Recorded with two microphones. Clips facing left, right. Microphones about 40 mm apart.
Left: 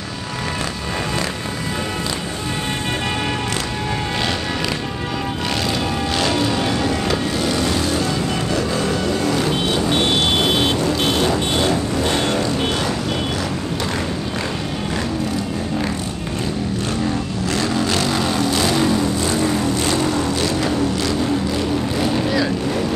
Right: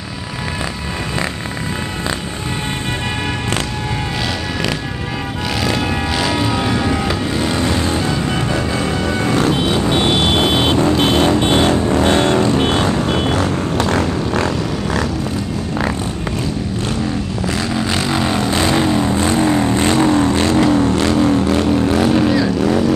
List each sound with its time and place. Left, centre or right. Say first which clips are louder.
6.5 s vehicle: right 2 dB; centre
7.3 s vehicle: right 2 dB; right
9.8 s vehicle: right 2 dB; centre
10.4 s vehicle: right 3 dB; right
17.7 s vehicle: right 3 dB; centre; by 21.6 s right